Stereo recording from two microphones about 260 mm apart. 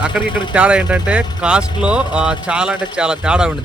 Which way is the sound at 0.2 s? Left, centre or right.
Centre.